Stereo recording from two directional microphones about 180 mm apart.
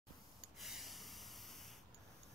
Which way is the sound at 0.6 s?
Centre (ahead or behind).